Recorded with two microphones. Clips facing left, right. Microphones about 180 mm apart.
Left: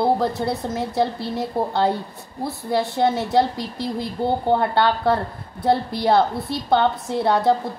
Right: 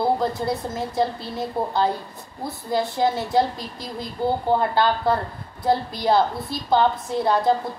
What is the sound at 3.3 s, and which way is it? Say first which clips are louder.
A woman's voice: left 2 dB; 70° left (ahead or behind).